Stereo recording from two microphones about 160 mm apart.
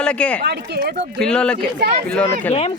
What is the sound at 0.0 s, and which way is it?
Speech, 5° left (ahead or behind).